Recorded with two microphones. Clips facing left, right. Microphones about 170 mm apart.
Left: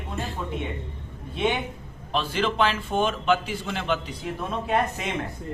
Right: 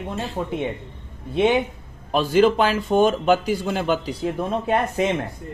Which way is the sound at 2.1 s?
45° right (ahead or behind).